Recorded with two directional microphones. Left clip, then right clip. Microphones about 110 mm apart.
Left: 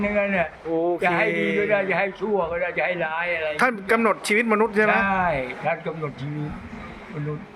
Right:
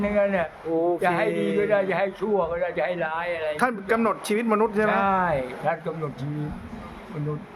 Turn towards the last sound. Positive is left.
turn(degrees=-25)  # may be behind; listen again after turning